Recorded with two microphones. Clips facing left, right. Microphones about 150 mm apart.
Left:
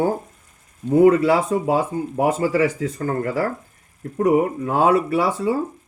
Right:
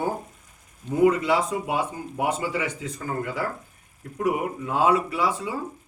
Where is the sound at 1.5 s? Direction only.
35° left (ahead or behind).